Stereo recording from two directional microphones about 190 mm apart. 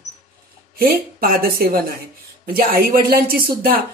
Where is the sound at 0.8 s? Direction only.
50° right (ahead or behind).